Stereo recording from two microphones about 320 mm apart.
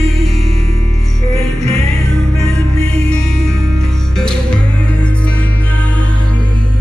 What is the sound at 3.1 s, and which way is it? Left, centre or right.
Music, left.